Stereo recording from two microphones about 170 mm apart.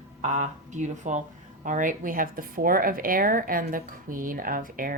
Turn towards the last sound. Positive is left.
turn(degrees=-55)  # may be behind; listen again after turning